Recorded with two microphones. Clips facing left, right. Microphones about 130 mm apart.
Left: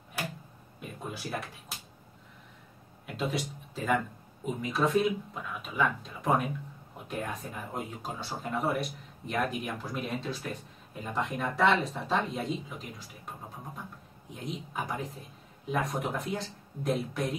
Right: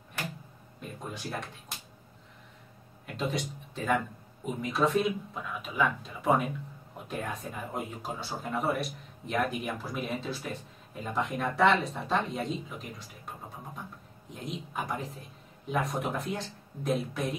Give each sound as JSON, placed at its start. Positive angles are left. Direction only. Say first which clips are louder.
{"t": 0.7, "sound": "a sound", "louder": "even", "side_deg": 5}
{"t": 3.1, "sound": "speech", "louder": "even", "side_deg": 0}
{"t": 14.3, "sound": "speech", "louder": "even", "side_deg": 0}